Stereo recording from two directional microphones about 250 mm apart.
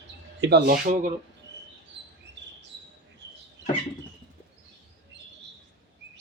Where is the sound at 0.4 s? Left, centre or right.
Right.